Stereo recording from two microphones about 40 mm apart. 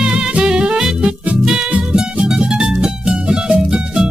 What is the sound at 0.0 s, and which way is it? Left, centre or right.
Music, right.